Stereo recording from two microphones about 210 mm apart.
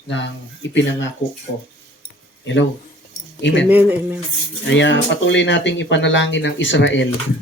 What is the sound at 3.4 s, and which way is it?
Speech, 60° left (ahead or behind).